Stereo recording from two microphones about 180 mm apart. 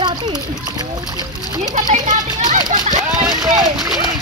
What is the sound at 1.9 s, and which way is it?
Speech, 40° right (ahead or behind).